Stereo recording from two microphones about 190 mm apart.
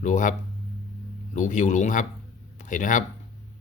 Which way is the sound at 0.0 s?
40° left (ahead or behind).